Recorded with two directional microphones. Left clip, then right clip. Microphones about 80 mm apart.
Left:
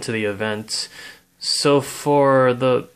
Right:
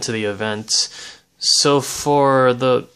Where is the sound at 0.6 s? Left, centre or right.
Centre.